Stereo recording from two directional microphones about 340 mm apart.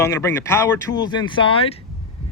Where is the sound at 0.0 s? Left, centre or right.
Centre.